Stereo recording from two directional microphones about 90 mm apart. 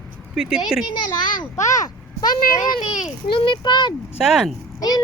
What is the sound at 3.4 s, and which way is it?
Speech, 60° left (ahead or behind).